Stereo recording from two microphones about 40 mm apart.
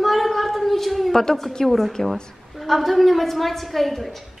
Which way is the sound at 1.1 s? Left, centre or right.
Centre.